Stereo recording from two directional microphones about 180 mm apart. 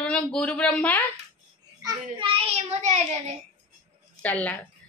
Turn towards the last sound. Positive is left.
turn(degrees=10)  # may be behind; listen again after turning